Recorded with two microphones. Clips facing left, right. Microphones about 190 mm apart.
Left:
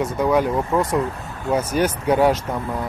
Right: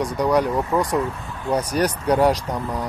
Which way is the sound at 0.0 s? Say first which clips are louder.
Left 1 dB; centre (ahead or behind).